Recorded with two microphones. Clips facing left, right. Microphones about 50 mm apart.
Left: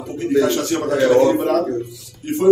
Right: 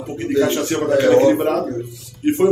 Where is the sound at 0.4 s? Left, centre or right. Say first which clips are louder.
Right 1 dB; right.